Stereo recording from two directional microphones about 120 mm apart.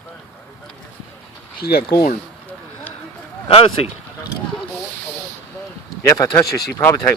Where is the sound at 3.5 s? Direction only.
55° left (ahead or behind).